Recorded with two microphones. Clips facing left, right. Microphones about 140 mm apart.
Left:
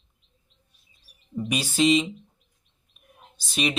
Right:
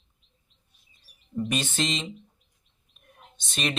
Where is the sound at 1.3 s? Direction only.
5° left (ahead or behind).